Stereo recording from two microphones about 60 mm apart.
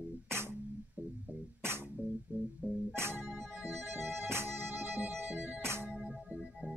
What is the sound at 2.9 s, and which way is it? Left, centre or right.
Music, right.